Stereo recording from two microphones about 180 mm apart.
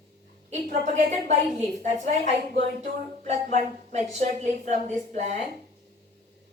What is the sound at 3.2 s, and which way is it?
Speech, 45° right (ahead or behind).